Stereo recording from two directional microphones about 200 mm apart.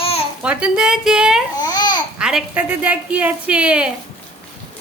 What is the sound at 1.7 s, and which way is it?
Babbling, 20° left (ahead or behind).